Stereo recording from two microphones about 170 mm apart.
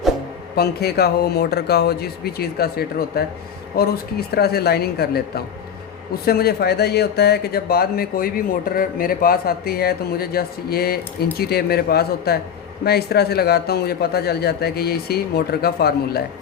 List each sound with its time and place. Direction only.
0.5 s a man's voice: 65° left (ahead or behind)